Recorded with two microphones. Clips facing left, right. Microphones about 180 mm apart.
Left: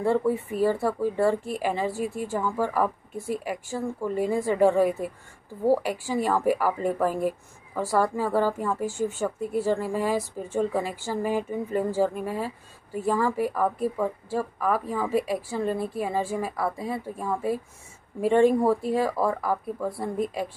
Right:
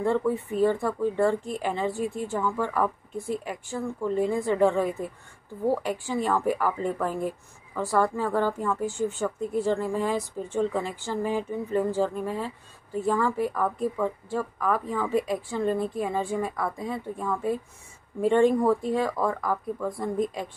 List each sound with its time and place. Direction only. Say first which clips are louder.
0.0 s speech: left 1 dB; 10° left (ahead or behind)